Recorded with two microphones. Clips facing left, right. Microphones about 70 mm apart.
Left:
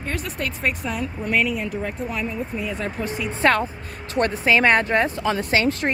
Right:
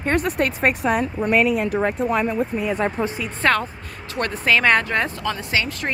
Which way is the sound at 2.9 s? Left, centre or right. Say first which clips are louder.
Right 3 dB; right.